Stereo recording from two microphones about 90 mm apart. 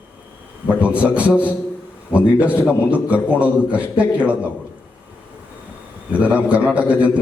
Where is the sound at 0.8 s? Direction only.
15° right (ahead or behind).